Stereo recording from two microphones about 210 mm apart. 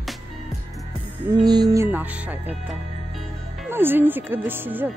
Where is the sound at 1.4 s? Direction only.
20° right (ahead or behind).